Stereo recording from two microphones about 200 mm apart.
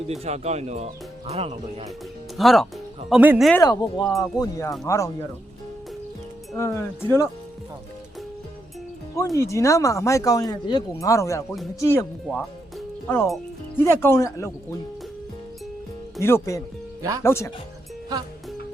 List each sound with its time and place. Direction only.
0.1 s speech: 35° right (ahead or behind)
2.4 s speech: centre (ahead or behind)
3.6 s speech: 20° left (ahead or behind)
6.6 s speech: 15° left (ahead or behind)
9.1 s speech: 15° left (ahead or behind)
12.2 s speech: centre (ahead or behind)
13.7 s speech: 10° left (ahead or behind)
16.2 s speech: 15° left (ahead or behind)
17.0 s speech: 20° right (ahead or behind)
17.2 s speech: 15° left (ahead or behind)